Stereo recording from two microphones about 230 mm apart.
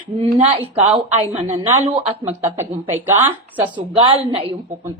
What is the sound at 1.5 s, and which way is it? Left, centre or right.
A woman's voice, centre.